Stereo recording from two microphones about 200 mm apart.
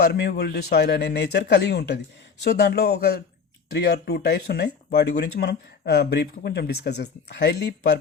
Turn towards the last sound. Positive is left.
turn(degrees=55)  # may be behind; listen again after turning